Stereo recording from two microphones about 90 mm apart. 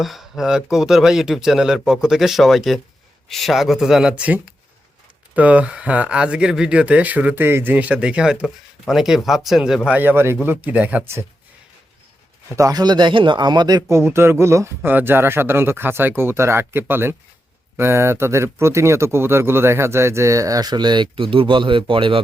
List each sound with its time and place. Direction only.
0.0 s speech: centre (ahead or behind)
10.0 s speech: 25° right (ahead or behind)
12.5 s speech: 45° right (ahead or behind)
13.9 s speech: 30° right (ahead or behind); by 22.2 s 70° right (ahead or behind)